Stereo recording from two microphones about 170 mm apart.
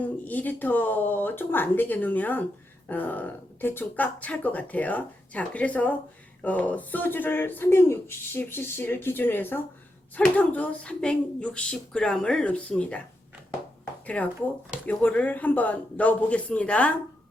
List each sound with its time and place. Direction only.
0.0 s speech: 10° left (ahead or behind)
14.2 s speech: 5° left (ahead or behind)